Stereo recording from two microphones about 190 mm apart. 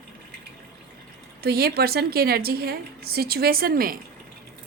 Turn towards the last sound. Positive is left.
turn(degrees=-50)  # may be behind; listen again after turning